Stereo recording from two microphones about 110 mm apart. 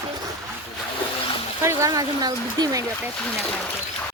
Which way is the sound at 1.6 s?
30° right (ahead or behind).